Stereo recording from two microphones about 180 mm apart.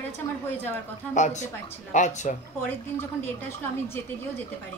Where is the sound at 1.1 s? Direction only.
40° left (ahead or behind).